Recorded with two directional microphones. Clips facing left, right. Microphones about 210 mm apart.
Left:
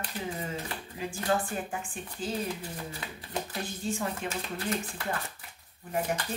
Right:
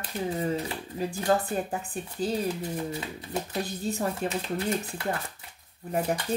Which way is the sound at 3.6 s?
40° right (ahead or behind).